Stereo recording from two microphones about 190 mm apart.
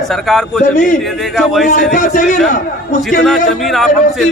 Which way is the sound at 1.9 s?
45° left (ahead or behind).